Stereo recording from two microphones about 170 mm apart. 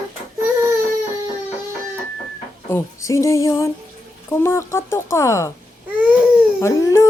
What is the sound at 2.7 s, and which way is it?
Speech, 15° left (ahead or behind).